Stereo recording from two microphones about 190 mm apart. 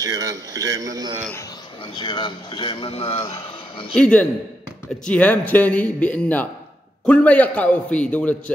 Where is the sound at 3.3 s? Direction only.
20° left (ahead or behind).